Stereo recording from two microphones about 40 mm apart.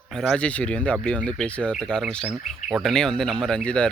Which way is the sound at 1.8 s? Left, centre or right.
Centre.